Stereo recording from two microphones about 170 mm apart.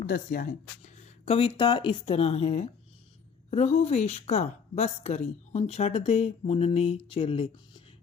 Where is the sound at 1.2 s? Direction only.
30° left (ahead or behind).